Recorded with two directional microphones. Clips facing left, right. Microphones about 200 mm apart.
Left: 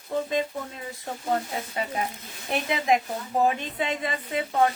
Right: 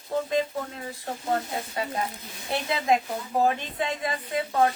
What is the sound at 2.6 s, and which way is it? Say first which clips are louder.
Speech: even; 15° left (ahead or behind).